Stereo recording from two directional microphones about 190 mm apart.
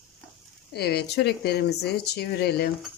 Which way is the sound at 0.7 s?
60° left (ahead or behind).